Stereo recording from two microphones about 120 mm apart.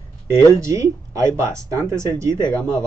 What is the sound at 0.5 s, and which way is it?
Speech, 25° right (ahead or behind).